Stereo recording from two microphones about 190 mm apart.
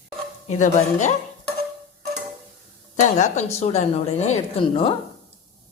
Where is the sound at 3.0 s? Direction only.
40° left (ahead or behind).